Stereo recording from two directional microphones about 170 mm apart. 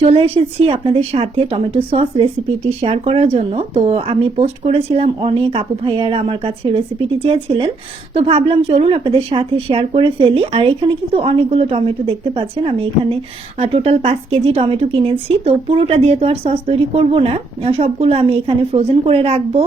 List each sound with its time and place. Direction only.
0.0 s a woman's voice: 35° right (ahead or behind)